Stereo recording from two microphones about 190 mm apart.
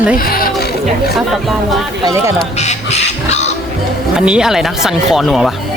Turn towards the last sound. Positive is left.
turn(degrees=0)  # may be behind; listen again after turning